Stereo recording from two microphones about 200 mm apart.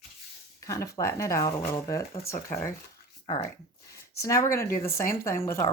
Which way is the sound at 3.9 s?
15° left (ahead or behind).